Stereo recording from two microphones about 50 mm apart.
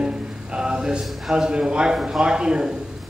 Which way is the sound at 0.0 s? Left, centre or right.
Centre.